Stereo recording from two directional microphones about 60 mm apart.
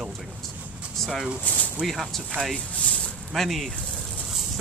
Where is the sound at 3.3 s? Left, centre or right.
Centre.